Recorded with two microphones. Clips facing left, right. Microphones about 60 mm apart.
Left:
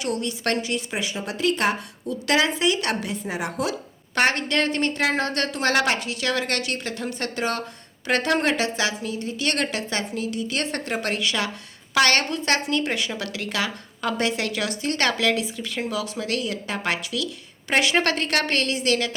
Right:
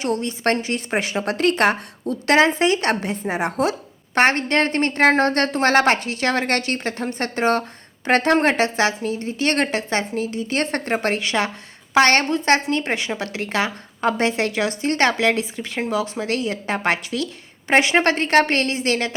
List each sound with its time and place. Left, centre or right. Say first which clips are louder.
0.0 s speech: right 4 dB; right
1.0 s speech: right 4 dB; right